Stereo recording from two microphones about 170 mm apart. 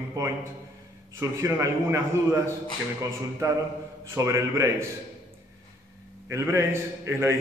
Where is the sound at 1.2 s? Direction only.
15° right (ahead or behind).